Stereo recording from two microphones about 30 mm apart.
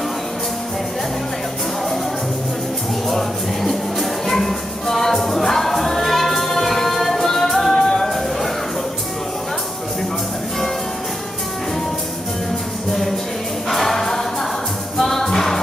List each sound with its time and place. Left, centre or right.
3.1 s music: centre
13.7 s choir: centre
15.0 s music: centre